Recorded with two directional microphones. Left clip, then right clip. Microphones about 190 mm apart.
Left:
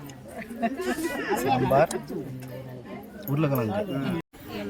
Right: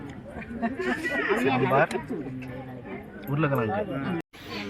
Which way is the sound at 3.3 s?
10° left (ahead or behind).